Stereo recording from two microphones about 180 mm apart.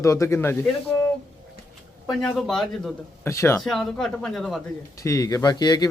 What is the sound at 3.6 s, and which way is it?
Speech, centre (ahead or behind).